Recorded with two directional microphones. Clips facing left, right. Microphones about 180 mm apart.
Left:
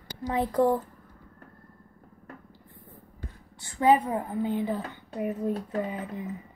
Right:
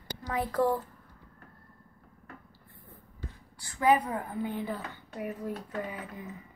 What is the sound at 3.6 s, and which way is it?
A woman's voice, 25° left (ahead or behind).